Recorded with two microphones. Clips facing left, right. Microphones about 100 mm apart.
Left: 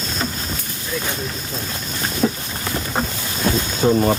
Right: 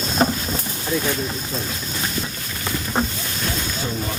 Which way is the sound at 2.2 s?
75° left (ahead or behind).